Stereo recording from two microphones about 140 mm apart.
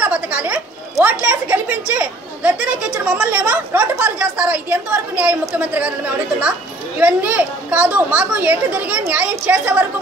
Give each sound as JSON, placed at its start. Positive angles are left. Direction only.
{"t": 0.0, "sound": "a sound", "side_deg": -10}
{"t": 1.0, "sound": "speech", "side_deg": -10}
{"t": 7.0, "sound": "speech", "side_deg": -10}